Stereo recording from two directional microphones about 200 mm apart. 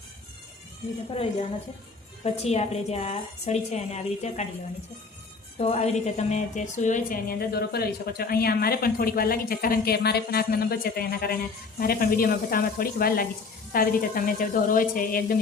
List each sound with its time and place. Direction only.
2.2 s a woman's voice: 30° left (ahead or behind)
5.5 s a woman's voice: 30° left (ahead or behind)